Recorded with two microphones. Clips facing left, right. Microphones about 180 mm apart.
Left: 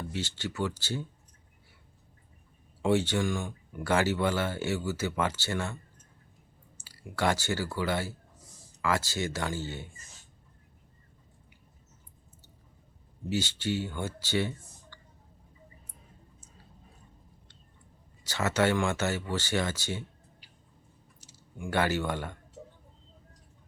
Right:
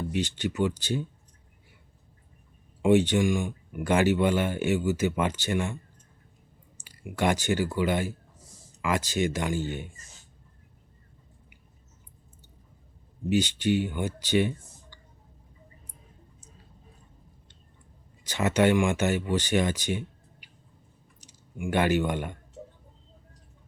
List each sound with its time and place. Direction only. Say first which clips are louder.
0.1 s speech: right 6 dB; 20° right (ahead or behind)
2.8 s speech: right 5 dB; 15° right (ahead or behind)
6.7 s speech: right 3 dB; 20° right (ahead or behind)
13.3 s speech: right 6 dB; 20° right (ahead or behind)
18.2 s speech: right 4 dB; 15° right (ahead or behind)